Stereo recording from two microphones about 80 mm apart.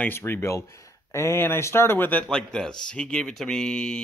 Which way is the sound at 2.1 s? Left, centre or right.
Centre.